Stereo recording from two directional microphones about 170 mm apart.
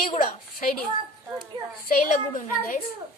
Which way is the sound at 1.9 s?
55° left (ahead or behind).